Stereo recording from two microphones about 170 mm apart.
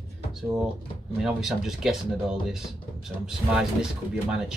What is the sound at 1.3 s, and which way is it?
Speech, centre (ahead or behind).